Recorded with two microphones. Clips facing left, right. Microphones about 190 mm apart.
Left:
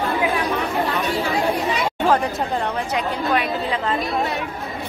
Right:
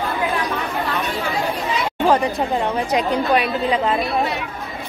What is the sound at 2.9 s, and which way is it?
A woman's voice, 20° right (ahead or behind).